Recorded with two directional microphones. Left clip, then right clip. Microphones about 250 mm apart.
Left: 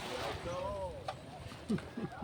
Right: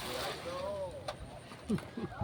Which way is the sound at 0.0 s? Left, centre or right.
Right.